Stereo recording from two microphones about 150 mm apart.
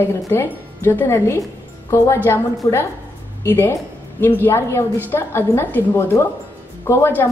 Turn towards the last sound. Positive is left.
turn(degrees=15)  # may be behind; listen again after turning